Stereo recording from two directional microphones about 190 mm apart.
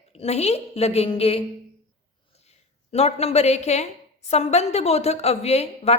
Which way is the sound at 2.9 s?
35° left (ahead or behind).